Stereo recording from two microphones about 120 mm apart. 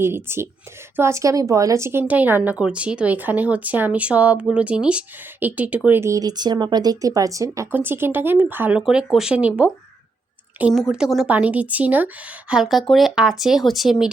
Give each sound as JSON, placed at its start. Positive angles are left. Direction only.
{"t": 0.0, "sound": "speech", "side_deg": -20}